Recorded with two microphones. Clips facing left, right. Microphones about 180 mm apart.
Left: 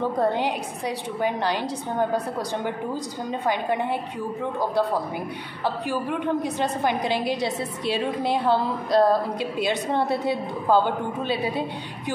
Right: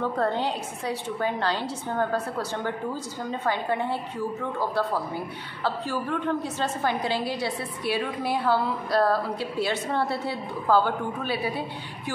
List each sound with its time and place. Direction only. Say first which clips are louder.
0.2 s a woman's voice: left 4 dB; 15° left (ahead or behind)